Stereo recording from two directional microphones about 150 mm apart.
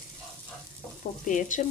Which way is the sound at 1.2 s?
60° left (ahead or behind).